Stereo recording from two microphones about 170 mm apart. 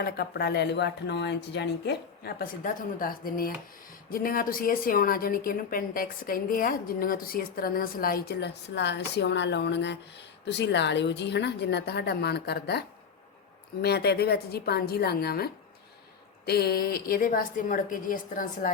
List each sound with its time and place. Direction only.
0.0 s a woman's voice: 70° left (ahead or behind)
13.8 s a woman's voice: 70° left (ahead or behind)
16.5 s a woman's voice: 65° left (ahead or behind)